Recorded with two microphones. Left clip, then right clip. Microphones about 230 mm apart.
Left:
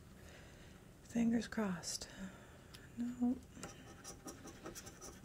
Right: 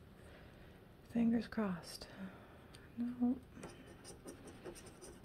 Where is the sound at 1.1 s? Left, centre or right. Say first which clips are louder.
Right 1 dB; centre.